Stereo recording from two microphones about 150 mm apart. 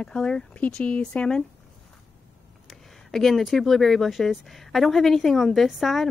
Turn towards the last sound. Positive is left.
turn(degrees=0)  # may be behind; listen again after turning